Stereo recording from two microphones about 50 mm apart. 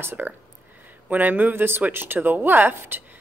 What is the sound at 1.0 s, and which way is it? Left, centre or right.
Speech, right.